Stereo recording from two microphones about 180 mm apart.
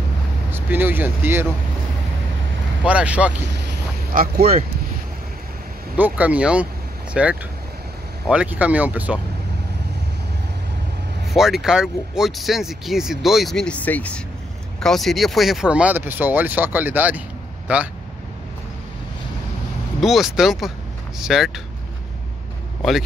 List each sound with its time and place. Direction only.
0.5 s speech: 10° right (ahead or behind)
2.8 s speech: 5° right (ahead or behind)
3.4 s boat: 70° right (ahead or behind); by 4.6 s 55° right (ahead or behind)
5.9 s speech: 10° right (ahead or behind)
11.3 s speech: centre (ahead or behind)
20.0 s speech: centre (ahead or behind)
22.8 s speech: centre (ahead or behind)